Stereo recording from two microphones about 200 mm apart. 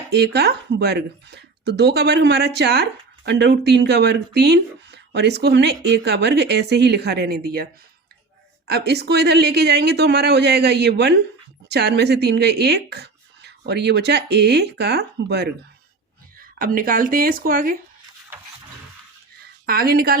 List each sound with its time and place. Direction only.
0.1 s speech: 55° right (ahead or behind)
19.6 s speech: 50° right (ahead or behind)